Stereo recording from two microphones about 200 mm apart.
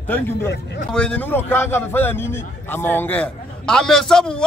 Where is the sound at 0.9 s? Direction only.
5° left (ahead or behind).